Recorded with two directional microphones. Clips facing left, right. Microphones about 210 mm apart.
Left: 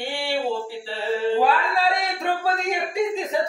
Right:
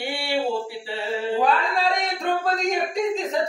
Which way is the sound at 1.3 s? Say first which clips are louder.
Left 1 dB; 5° left (ahead or behind).